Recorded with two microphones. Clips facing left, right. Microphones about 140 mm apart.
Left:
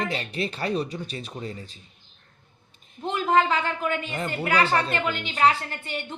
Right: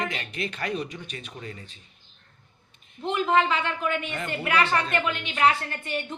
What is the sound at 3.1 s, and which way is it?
A woman's voice, 40° left (ahead or behind).